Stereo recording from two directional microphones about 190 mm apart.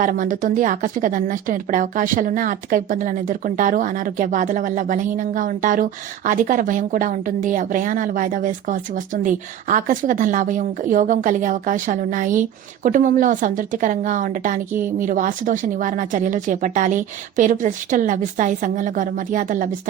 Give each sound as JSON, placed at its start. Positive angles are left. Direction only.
{"t": 0.0, "sound": "speech", "side_deg": -45}